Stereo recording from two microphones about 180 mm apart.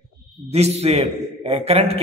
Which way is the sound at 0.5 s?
35° right (ahead or behind).